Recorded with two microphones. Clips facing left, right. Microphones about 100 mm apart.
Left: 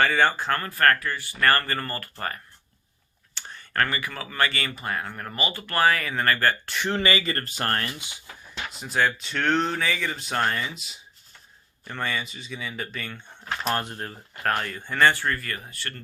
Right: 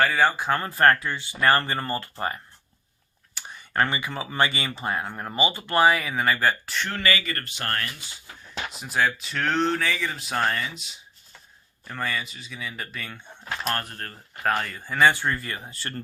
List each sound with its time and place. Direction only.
0.0 s speech: 5° right (ahead or behind)
0.6 s speech: 25° right (ahead or behind)
6.7 s speech: 20° left (ahead or behind); by 7.9 s 40° left (ahead or behind)
8.7 s speech: 5° right (ahead or behind)
13.8 s speech: 20° left (ahead or behind)
14.1 s speech: centre (ahead or behind)
15.1 s speech: 20° right (ahead or behind)